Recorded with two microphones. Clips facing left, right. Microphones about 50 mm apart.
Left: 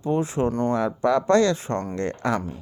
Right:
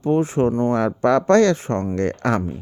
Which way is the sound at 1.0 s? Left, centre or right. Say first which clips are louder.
Right 4 dB; right.